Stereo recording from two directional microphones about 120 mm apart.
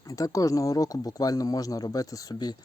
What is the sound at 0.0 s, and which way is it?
Speech, 30° left (ahead or behind).